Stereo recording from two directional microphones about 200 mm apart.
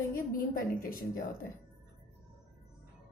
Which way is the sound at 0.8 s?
45° left (ahead or behind).